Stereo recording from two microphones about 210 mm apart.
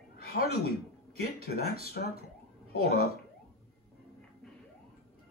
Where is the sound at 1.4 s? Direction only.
45° left (ahead or behind).